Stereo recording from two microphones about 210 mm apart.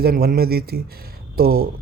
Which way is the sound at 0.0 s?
45° right (ahead or behind).